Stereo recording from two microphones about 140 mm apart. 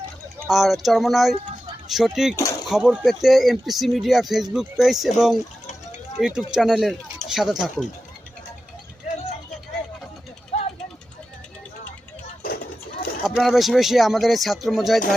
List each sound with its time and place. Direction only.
0.4 s speech: centre (ahead or behind)
2.3 s speech: 20° left (ahead or behind)
2.6 s speech: 5° right (ahead or behind)
10.5 s a sound: 50° left (ahead or behind)
13.2 s speech: centre (ahead or behind)